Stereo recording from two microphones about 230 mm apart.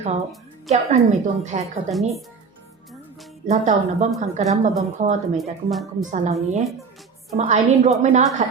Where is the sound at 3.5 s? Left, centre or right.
Right.